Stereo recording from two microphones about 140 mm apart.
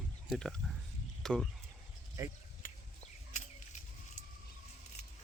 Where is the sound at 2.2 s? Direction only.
20° right (ahead or behind).